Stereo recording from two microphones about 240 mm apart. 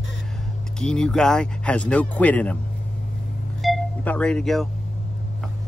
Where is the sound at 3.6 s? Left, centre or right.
Centre.